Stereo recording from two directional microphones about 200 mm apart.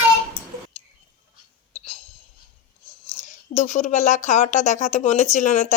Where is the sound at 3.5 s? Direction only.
35° left (ahead or behind).